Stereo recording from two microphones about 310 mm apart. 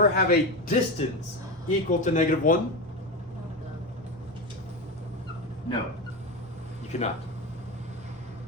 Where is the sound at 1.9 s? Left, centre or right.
Left.